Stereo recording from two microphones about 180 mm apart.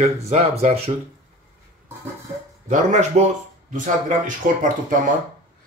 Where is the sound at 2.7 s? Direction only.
40° right (ahead or behind).